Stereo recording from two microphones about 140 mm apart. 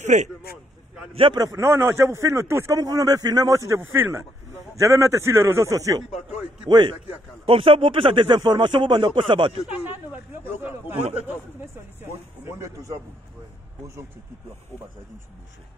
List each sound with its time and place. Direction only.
0.0 s speech: 60° right (ahead or behind)
1.1 s speech: 40° right (ahead or behind)
1.4 s speech: 20° right (ahead or behind)
6.6 s speech: 35° right (ahead or behind)
9.7 s speech: 10° right (ahead or behind)
10.4 s a sound: 15° right (ahead or behind)
11.2 s music: 15° right (ahead or behind)